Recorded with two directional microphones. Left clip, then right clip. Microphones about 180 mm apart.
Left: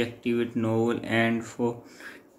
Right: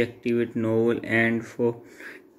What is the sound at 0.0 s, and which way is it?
Speech, 10° right (ahead or behind).